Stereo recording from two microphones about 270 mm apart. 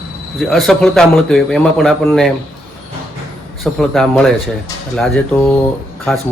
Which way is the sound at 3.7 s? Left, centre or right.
Centre.